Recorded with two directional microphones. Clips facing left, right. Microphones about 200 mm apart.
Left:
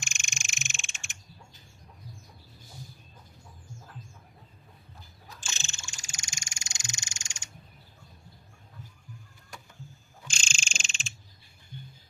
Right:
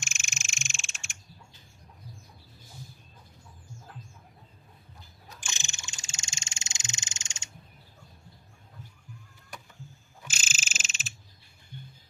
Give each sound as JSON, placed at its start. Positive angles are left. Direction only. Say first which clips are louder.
{"t": 0.0, "sound": "frog", "louder": "even", "side_deg": 0}
{"t": 5.4, "sound": "frog", "louder": "right 1 dB", "side_deg": -15}
{"t": 10.2, "sound": "frog", "louder": "even", "side_deg": -5}